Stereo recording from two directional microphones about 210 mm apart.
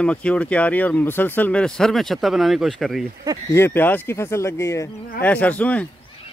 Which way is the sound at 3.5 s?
10° left (ahead or behind).